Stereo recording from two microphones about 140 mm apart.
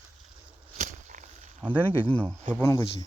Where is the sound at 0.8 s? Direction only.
60° right (ahead or behind).